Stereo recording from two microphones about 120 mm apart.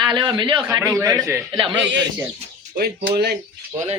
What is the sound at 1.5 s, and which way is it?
Speech, 45° right (ahead or behind).